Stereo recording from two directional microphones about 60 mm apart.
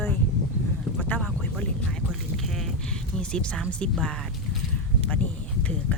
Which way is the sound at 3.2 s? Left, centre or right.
Centre.